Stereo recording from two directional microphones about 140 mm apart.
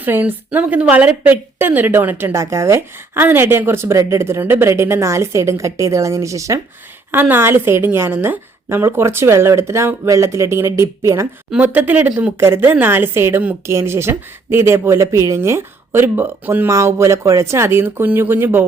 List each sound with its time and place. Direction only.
0.0 s speech: 15° right (ahead or behind)